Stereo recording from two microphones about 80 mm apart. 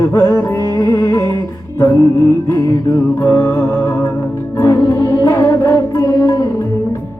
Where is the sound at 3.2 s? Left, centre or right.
Left.